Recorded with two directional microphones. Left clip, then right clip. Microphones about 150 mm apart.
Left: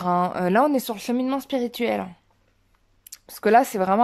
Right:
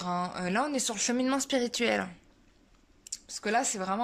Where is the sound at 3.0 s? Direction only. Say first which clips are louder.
Left 11 dB; 55° left (ahead or behind).